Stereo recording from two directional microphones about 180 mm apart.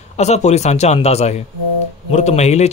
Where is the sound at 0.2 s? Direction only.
40° left (ahead or behind).